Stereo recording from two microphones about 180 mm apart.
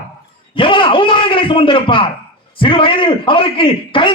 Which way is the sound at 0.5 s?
30° left (ahead or behind).